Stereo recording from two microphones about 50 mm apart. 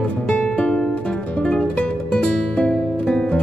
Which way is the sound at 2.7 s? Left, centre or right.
Centre.